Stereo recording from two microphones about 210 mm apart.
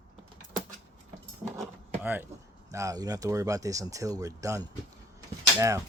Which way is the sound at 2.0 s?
10° right (ahead or behind).